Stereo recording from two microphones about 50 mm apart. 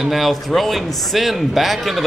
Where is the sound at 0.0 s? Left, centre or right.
Centre.